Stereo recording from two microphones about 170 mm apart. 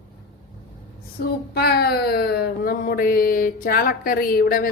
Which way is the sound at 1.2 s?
60° left (ahead or behind).